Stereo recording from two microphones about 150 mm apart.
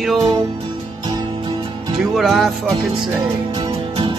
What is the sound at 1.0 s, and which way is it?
Music, 30° right (ahead or behind).